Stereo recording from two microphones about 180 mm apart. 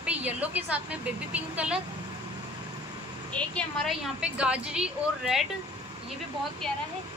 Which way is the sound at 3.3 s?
5° left (ahead or behind).